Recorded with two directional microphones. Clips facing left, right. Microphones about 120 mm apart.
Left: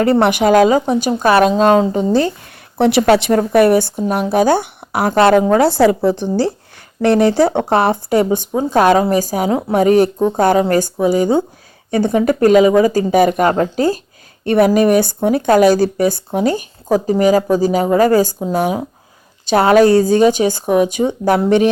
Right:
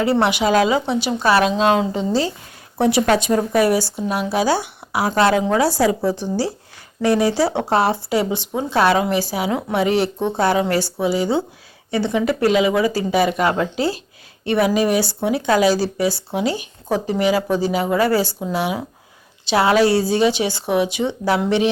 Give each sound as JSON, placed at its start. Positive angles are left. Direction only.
{"t": 0.0, "sound": "speech", "side_deg": 50}
{"t": 2.7, "sound": "speech", "side_deg": 70}
{"t": 9.5, "sound": "a woman's voice", "side_deg": 30}
{"t": 9.7, "sound": "speech", "side_deg": 45}